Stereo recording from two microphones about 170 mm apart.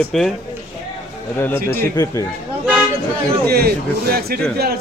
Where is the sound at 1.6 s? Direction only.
65° right (ahead or behind).